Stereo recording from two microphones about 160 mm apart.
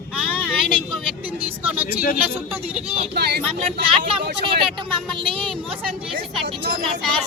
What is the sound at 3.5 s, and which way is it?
Speech, 40° right (ahead or behind).